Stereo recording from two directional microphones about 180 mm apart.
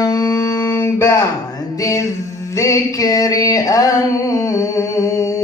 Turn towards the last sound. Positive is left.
turn(degrees=15)  # may be behind; listen again after turning